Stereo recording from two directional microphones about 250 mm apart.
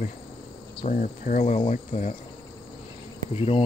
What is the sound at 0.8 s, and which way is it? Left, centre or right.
Cricket, left.